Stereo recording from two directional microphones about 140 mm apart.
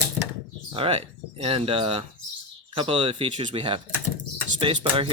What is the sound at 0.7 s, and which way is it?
Speech, 45° right (ahead or behind).